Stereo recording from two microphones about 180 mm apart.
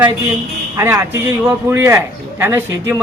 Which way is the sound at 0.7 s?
15° right (ahead or behind).